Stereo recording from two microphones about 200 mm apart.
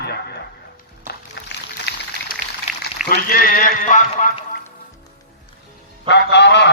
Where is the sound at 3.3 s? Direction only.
45° left (ahead or behind).